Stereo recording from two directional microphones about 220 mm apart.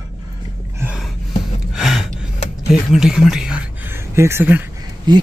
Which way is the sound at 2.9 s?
Centre (ahead or behind).